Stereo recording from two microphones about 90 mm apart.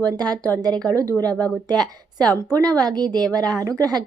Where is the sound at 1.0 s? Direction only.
40° right (ahead or behind).